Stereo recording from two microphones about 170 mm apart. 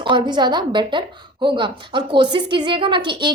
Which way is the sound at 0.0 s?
25° right (ahead or behind).